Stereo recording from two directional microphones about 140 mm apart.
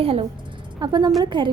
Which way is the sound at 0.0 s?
45° right (ahead or behind).